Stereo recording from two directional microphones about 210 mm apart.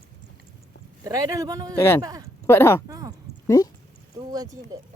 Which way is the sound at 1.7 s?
10° left (ahead or behind).